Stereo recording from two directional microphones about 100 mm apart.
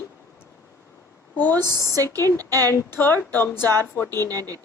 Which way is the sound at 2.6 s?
25° left (ahead or behind).